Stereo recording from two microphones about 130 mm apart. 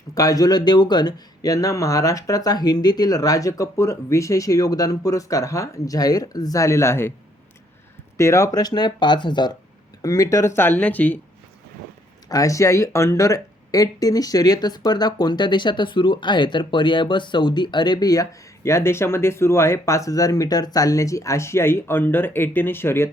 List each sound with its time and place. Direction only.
0.1 s speech: 25° left (ahead or behind)
8.2 s speech: 25° left (ahead or behind)
10.0 s speech: 25° left (ahead or behind)
12.3 s speech: 25° left (ahead or behind)